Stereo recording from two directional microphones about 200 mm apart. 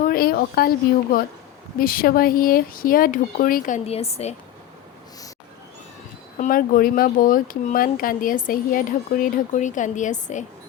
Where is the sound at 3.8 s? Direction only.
30° left (ahead or behind).